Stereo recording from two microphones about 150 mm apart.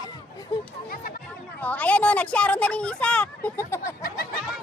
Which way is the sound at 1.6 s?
10° left (ahead or behind).